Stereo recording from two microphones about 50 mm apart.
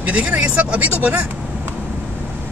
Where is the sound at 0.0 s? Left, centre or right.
Right.